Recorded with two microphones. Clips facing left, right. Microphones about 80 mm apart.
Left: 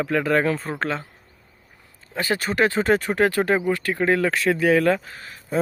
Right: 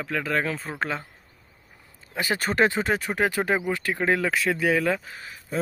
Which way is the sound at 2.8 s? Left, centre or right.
Centre.